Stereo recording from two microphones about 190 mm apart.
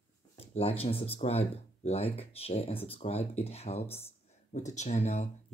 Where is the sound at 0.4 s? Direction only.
30° left (ahead or behind).